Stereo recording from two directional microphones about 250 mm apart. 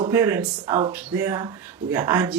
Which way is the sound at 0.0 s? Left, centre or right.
Centre.